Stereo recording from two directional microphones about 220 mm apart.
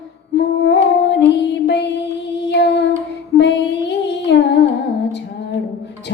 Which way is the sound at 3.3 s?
50° left (ahead or behind).